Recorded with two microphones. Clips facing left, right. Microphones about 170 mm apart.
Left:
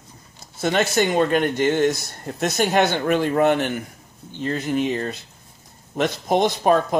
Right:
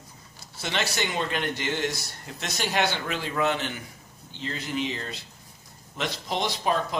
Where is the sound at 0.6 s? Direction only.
50° left (ahead or behind).